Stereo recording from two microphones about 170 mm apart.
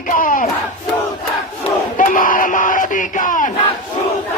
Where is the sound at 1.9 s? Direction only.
55° left (ahead or behind).